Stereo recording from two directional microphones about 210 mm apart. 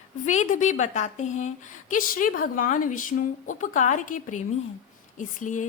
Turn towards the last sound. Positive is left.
turn(degrees=35)  # may be behind; listen again after turning